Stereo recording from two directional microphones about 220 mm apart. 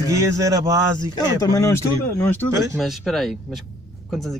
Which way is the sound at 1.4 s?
15° left (ahead or behind).